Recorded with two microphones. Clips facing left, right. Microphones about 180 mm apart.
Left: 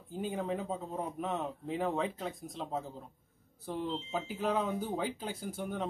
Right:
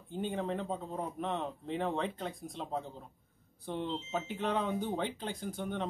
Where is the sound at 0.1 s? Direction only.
Centre (ahead or behind).